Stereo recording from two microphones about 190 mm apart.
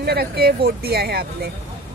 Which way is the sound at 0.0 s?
55° right (ahead or behind).